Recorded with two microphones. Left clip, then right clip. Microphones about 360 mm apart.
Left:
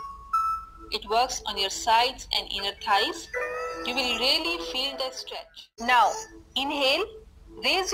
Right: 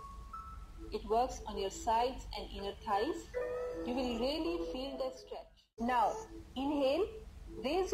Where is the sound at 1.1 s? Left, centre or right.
Left.